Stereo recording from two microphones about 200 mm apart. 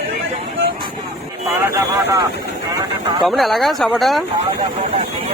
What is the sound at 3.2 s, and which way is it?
Speech, centre (ahead or behind).